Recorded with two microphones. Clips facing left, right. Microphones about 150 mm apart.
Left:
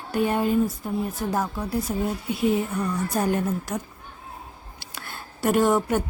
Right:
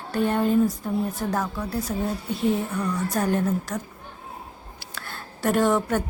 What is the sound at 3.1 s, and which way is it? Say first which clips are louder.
Speech: right 1 dB; 10° left (ahead or behind).